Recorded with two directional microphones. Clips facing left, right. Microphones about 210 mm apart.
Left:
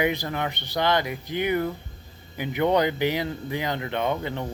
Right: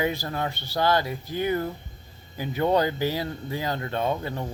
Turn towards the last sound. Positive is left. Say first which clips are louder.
# left 1 dB
turn(degrees=20)  # may be behind; listen again after turning